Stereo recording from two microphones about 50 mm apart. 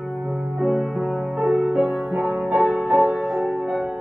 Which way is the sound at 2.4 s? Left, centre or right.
Right.